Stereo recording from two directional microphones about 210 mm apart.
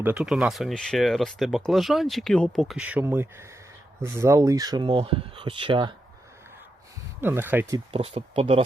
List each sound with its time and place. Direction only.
0.0 s speech: 5° right (ahead or behind); by 5.9 s 25° right (ahead or behind)
7.2 s speech: 10° right (ahead or behind)
7.9 s speech: 30° right (ahead or behind)